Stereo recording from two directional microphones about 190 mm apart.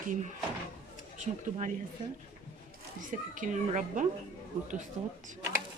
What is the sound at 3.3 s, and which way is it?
Speech, 45° right (ahead or behind).